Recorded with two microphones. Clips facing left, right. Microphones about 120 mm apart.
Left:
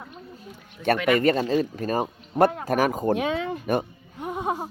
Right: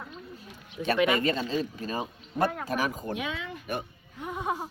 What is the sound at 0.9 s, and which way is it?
Speech, 20° right (ahead or behind).